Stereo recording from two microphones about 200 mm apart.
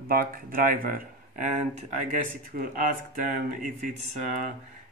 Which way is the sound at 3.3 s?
40° right (ahead or behind).